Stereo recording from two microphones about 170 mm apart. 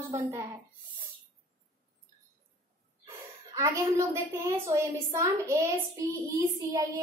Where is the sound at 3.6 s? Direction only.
15° right (ahead or behind).